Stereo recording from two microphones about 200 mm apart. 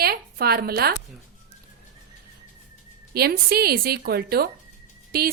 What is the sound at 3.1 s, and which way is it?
A woman's voice, 50° right (ahead or behind).